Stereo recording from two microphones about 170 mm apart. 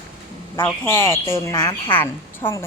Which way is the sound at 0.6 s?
15° left (ahead or behind).